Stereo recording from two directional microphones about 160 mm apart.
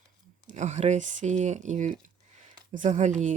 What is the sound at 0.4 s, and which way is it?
Speech, 50° right (ahead or behind).